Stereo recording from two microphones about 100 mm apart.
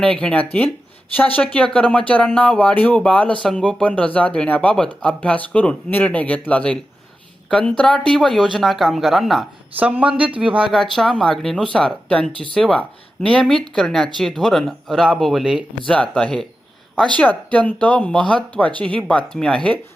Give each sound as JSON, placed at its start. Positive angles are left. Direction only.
{"t": 0.0, "sound": "speech", "side_deg": 10}
{"t": 9.7, "sound": "speech", "side_deg": -15}
{"t": 10.7, "sound": "speech", "side_deg": 5}
{"t": 15.9, "sound": "speech", "side_deg": 10}